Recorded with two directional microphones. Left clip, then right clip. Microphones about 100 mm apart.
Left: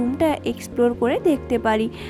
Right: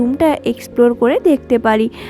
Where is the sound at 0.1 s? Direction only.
35° right (ahead or behind).